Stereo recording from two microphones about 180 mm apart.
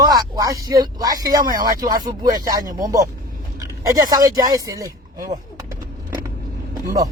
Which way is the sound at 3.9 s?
20° right (ahead or behind).